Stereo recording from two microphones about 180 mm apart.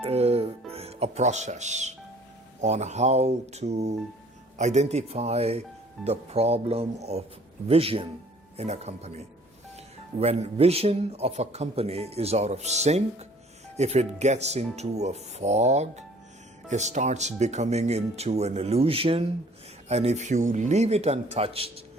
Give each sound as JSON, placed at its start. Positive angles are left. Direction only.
{"t": 0.0, "sound": "a man's voice", "side_deg": -35}